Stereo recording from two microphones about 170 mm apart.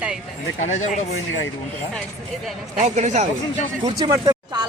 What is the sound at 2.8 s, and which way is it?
Speech, 45° right (ahead or behind).